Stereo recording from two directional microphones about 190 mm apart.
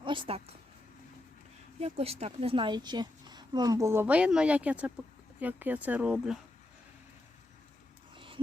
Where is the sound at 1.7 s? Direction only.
30° right (ahead or behind); by 6.3 s 5° right (ahead or behind).